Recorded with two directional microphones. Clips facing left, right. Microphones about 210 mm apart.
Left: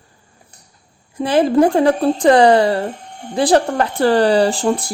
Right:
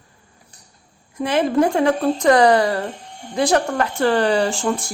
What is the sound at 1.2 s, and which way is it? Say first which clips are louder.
Speech: left 4 dB; 35° left (ahead or behind).